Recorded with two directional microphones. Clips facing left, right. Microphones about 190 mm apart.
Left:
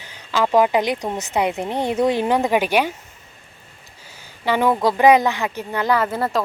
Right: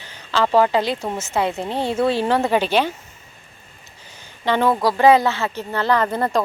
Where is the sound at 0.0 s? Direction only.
10° left (ahead or behind).